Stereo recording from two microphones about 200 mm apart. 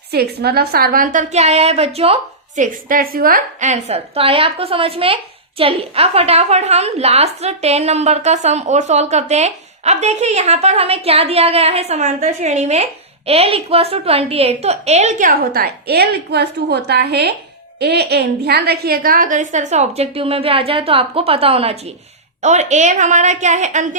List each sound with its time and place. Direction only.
0.1 s a woman's voice: 50° right (ahead or behind); by 2.1 s 30° right (ahead or behind)
2.6 s a woman's voice: 45° right (ahead or behind)